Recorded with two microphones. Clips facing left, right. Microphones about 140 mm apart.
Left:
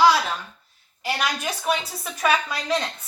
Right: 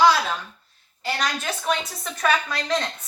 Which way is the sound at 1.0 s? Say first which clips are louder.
Even; 10° left (ahead or behind).